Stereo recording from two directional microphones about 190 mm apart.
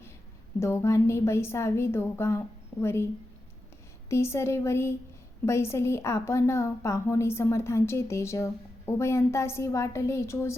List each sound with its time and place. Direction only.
0.6 s a woman's voice: 15° left (ahead or behind)
4.1 s a woman's voice: 15° left (ahead or behind)